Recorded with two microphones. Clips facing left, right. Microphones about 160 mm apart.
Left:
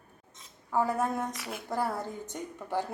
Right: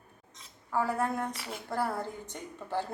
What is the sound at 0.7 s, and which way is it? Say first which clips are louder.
A woman's voice: left 2 dB; 15° left (ahead or behind).